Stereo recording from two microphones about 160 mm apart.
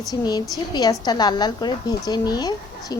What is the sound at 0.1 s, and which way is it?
A woman's voice, 25° left (ahead or behind).